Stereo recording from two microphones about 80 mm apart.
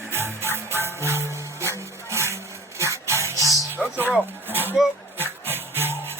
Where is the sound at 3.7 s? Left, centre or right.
Left.